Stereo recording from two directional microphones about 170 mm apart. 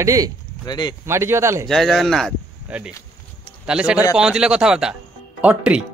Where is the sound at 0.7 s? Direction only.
25° left (ahead or behind).